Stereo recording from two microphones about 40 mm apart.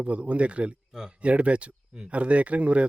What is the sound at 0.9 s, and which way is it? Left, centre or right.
Speech, centre.